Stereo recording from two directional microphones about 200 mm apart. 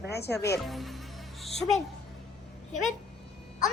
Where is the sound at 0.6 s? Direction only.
Centre (ahead or behind).